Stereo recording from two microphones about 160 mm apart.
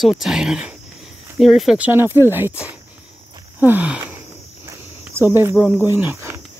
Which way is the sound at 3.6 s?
10° right (ahead or behind).